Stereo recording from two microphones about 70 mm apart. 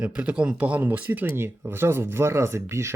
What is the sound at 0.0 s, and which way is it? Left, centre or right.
Speech, centre.